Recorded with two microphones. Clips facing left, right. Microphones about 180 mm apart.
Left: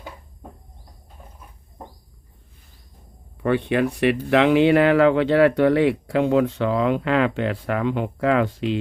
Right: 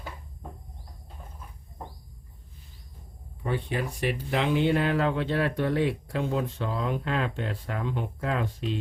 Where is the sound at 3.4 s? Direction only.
70° left (ahead or behind).